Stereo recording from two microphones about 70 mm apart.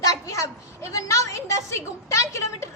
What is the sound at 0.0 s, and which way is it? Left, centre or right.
A woman's voice, left.